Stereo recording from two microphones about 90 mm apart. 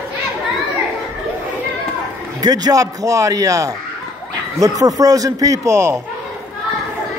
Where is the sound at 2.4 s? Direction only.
45° right (ahead or behind).